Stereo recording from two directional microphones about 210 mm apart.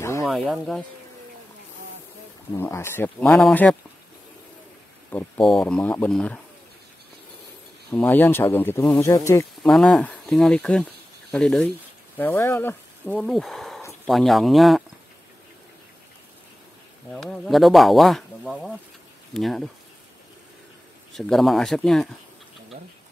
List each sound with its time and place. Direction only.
0.0 s snake: 10° left (ahead or behind)
0.3 s speech: centre (ahead or behind)
2.5 s speech: 10° left (ahead or behind)
5.1 s speech: centre (ahead or behind)
7.9 s speech: 10° left (ahead or behind)
9.7 s speech: centre (ahead or behind)
17.1 s speech: centre (ahead or behind)
21.1 s speech: centre (ahead or behind)